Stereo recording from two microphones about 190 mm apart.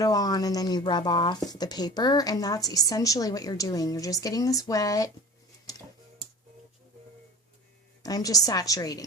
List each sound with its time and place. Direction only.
0.0 s speech: 20° left (ahead or behind)
8.0 s speech: 20° left (ahead or behind)